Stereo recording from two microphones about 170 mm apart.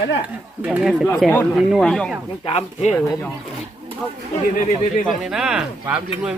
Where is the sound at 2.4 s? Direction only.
35° left (ahead or behind).